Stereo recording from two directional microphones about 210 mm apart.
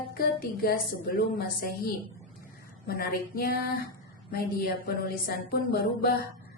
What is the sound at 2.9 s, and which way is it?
Speech, 45° left (ahead or behind).